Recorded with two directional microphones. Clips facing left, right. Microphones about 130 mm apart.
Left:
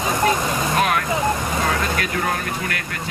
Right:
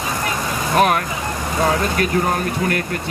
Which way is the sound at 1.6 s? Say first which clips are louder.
Right 9 dB; 25° right (ahead or behind).